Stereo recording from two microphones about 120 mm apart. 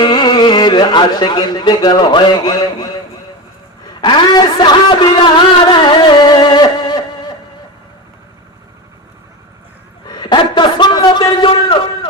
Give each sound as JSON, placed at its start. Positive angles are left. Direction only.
{"t": 0.0, "sound": "speech", "side_deg": 35}
{"t": 4.0, "sound": "speech", "side_deg": 35}
{"t": 5.8, "sound": "a sound", "side_deg": 40}
{"t": 10.1, "sound": "a man's voice", "side_deg": 35}